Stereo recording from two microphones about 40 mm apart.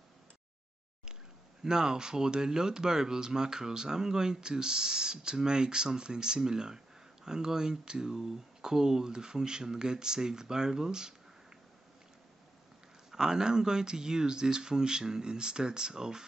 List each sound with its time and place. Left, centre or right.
1.6 s speech: centre
13.1 s speech: centre